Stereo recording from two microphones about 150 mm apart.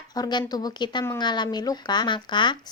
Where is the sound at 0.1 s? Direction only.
30° left (ahead or behind).